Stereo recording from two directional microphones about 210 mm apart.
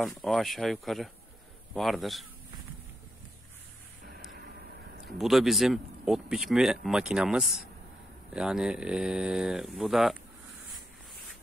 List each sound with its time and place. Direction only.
0.0 s speech: centre (ahead or behind)
4.3 s vehicle: 45° right (ahead or behind)
5.1 s speech: centre (ahead or behind)